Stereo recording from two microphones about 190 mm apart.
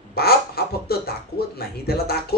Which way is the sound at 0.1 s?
55° left (ahead or behind).